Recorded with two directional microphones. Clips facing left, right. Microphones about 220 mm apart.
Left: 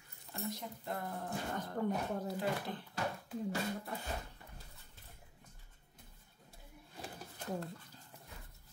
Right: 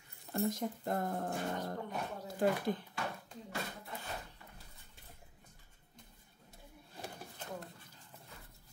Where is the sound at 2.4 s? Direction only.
50° right (ahead or behind).